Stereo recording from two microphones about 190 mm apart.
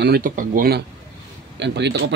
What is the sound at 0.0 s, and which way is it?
Speech, 50° right (ahead or behind).